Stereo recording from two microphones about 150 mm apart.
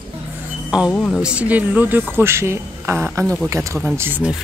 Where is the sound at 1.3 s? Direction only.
10° right (ahead or behind).